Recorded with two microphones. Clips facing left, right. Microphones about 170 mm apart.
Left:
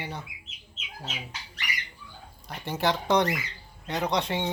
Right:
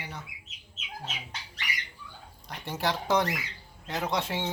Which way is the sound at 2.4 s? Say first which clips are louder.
Left 4 dB; centre (ahead or behind).